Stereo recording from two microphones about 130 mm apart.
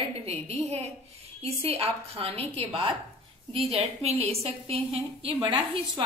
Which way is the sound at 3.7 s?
55° right (ahead or behind).